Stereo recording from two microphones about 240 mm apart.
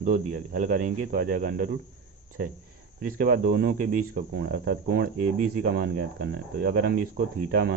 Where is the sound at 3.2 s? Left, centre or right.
Right.